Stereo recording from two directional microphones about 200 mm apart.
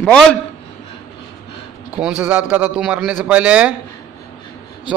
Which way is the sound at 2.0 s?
5° right (ahead or behind).